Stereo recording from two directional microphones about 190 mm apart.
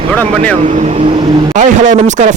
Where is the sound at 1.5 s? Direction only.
40° right (ahead or behind).